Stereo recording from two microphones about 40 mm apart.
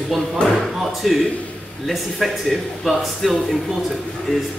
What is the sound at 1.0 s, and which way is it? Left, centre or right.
A man's voice, centre.